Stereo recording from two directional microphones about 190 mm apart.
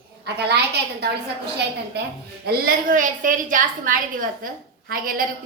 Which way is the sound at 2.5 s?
45° right (ahead or behind).